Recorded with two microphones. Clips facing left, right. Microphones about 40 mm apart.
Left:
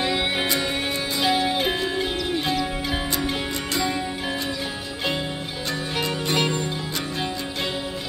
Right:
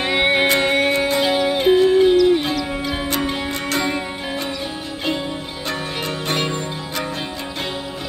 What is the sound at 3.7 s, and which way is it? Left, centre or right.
Music, right.